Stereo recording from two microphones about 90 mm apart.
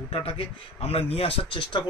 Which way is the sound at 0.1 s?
90° left.